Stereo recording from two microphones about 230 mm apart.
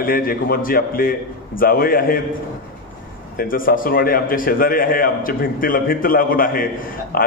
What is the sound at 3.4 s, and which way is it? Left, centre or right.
A man's voice, left.